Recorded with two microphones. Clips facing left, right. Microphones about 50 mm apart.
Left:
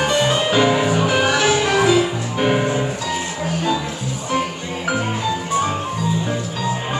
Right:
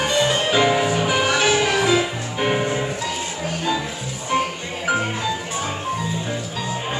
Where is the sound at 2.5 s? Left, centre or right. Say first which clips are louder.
Left 3 dB; centre.